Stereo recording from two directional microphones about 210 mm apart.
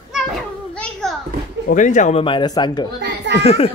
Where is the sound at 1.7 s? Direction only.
35° left (ahead or behind).